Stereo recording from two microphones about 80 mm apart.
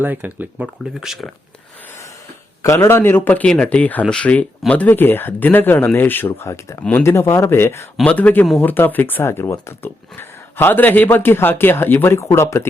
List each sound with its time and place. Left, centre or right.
0.0 s speech: right
0.9 s speech: centre
2.6 s speech: left
6.5 s speech: left
8.0 s speech: centre; by 12.6 s left